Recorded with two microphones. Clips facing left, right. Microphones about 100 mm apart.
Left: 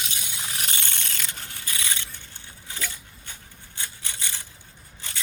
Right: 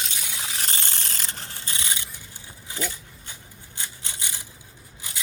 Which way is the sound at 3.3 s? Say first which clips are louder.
Even; 20° right (ahead or behind).